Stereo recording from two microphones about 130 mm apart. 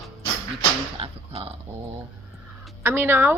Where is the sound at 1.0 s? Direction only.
50° right (ahead or behind).